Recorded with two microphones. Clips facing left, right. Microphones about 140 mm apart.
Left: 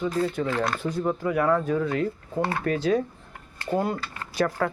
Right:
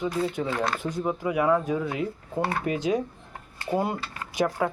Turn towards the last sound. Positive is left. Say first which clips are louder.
# even
turn(degrees=-15)  # may be behind; listen again after turning